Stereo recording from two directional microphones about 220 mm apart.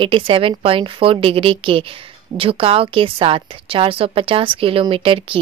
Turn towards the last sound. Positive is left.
turn(degrees=-25)  # may be behind; listen again after turning